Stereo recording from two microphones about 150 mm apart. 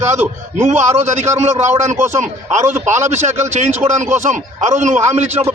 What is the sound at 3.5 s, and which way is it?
A man's voice, 50° right (ahead or behind).